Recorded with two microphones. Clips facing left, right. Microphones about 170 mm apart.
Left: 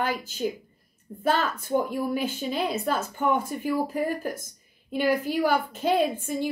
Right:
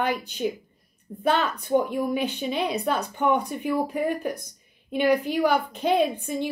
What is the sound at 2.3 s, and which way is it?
A woman's voice, centre (ahead or behind).